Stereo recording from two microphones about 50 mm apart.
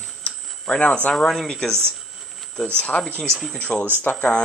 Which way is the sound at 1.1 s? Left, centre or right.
Centre.